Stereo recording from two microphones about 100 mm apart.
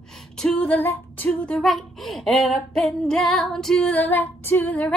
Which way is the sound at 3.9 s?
20° left (ahead or behind).